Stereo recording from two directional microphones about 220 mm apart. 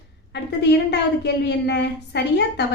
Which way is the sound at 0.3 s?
50° left (ahead or behind).